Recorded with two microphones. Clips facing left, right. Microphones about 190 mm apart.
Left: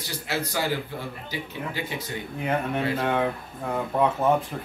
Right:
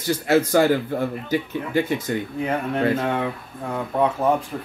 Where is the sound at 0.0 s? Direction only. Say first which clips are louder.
Right 11 dB; 50° right (ahead or behind).